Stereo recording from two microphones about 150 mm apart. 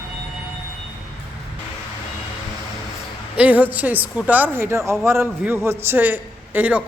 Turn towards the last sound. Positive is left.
turn(degrees=-10)  # may be behind; listen again after turning